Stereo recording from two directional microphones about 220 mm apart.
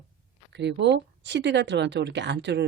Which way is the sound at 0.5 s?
50° right (ahead or behind).